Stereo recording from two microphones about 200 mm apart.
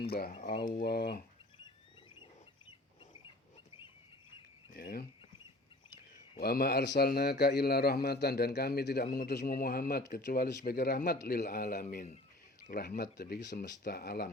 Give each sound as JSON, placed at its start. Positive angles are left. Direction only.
{"t": 0.0, "sound": "a man's voice", "side_deg": 50}
{"t": 4.7, "sound": "speech", "side_deg": 50}
{"t": 6.4, "sound": "a man's voice", "side_deg": 50}